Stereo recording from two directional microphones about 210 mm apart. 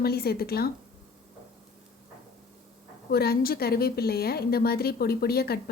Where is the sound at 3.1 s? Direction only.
50° left (ahead or behind).